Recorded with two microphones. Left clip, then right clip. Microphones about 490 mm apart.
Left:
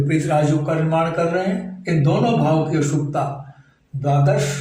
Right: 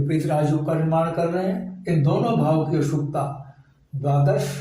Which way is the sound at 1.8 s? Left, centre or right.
Right.